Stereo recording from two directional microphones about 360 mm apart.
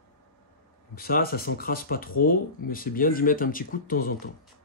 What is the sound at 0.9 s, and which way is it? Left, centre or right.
Speech, left.